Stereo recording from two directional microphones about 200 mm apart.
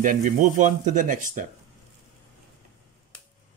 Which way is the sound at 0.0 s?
40° right (ahead or behind).